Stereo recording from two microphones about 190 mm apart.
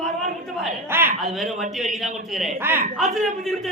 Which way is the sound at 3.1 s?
Centre (ahead or behind).